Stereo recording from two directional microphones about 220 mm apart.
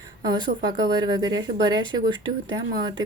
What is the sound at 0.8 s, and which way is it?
Speech, 15° right (ahead or behind).